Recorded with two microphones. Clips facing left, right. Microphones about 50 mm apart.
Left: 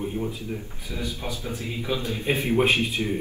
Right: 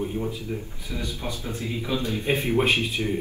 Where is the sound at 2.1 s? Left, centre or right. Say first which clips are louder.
Even; left.